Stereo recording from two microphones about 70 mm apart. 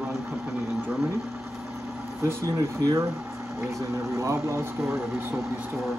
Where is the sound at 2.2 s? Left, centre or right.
Right.